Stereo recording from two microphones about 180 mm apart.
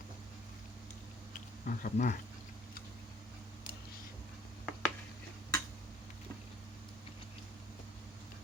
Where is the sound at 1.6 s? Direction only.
50° left (ahead or behind).